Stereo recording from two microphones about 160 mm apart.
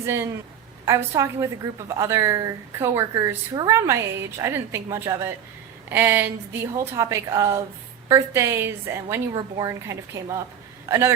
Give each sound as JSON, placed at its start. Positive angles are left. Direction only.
{"t": 0.0, "sound": "a woman's voice", "side_deg": -15}